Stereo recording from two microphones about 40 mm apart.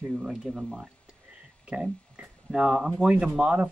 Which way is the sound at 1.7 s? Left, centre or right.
Right.